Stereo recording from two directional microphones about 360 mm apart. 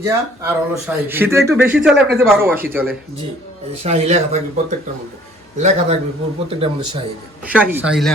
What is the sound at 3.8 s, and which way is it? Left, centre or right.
A man's voice, centre.